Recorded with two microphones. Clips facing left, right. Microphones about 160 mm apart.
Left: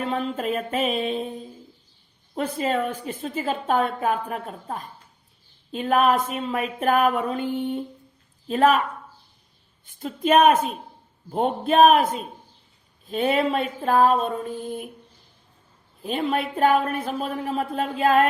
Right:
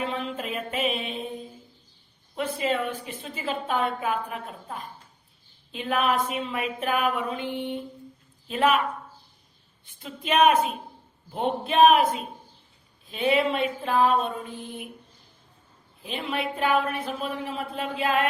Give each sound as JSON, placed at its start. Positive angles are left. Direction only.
{"t": 0.0, "sound": "a sound", "side_deg": 45}
{"t": 2.3, "sound": "a woman's voice", "side_deg": 40}
{"t": 9.8, "sound": "a woman's voice", "side_deg": 45}
{"t": 11.7, "sound": "a woman's voice", "side_deg": 45}
{"t": 16.0, "sound": "a woman's voice", "side_deg": 45}